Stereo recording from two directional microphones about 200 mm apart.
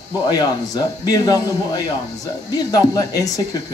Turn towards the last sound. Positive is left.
turn(degrees=20)  # may be behind; listen again after turning